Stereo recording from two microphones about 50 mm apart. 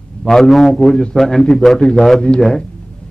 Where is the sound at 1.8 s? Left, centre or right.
Centre.